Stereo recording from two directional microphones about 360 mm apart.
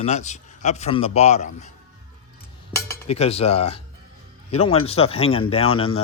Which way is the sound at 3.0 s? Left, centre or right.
Centre.